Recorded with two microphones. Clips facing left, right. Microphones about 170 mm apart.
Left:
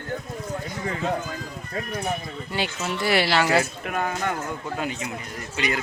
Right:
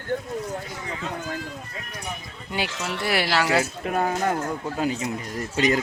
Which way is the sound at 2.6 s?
80° right.